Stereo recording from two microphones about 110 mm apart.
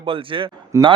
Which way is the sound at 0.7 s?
25° right (ahead or behind).